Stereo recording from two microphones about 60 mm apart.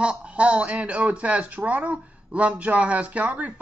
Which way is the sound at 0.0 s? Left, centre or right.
Centre.